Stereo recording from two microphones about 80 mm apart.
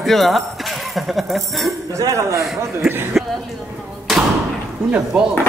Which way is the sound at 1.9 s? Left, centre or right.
Right.